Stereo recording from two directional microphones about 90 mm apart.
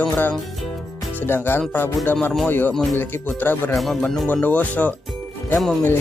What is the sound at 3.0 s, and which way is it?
Speech, 20° left (ahead or behind).